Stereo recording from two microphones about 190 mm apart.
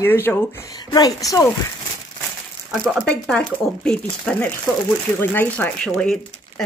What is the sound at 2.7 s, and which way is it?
Speech, 5° left (ahead or behind).